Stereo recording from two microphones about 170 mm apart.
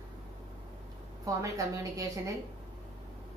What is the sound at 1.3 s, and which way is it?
Speech, 20° right (ahead or behind).